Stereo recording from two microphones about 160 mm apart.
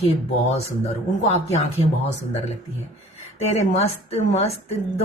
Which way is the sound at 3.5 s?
45° left (ahead or behind).